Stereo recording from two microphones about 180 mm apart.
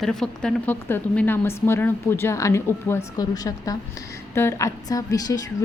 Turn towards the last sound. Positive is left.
turn(degrees=20)  # may be behind; listen again after turning